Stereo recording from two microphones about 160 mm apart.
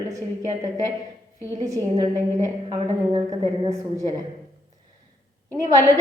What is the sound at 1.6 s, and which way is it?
Speech, 20° right (ahead or behind).